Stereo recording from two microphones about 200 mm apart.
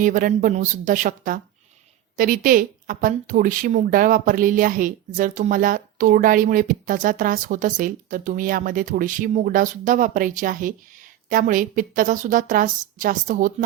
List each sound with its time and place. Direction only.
0.0 s speech: 40° right (ahead or behind)